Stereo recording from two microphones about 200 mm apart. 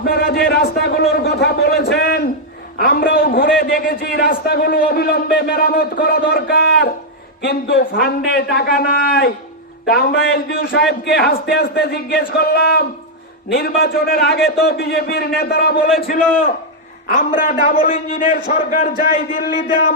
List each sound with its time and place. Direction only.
0.0 s a man's voice: 50° left (ahead or behind)